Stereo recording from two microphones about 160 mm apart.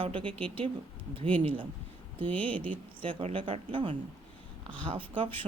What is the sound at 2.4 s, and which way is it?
Speech, 10° left (ahead or behind).